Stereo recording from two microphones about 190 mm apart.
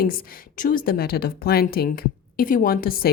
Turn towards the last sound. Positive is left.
turn(degrees=50)  # may be behind; listen again after turning